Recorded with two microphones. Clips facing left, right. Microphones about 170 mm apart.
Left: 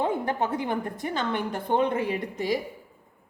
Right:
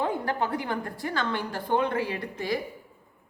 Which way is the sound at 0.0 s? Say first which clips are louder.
Left 2 dB; 20° left (ahead or behind).